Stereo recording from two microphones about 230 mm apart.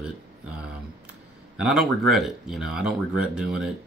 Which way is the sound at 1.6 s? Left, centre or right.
Centre.